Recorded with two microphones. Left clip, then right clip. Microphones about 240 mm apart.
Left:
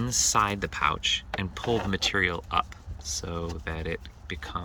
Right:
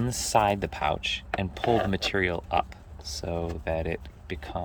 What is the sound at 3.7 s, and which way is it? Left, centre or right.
Speech, centre.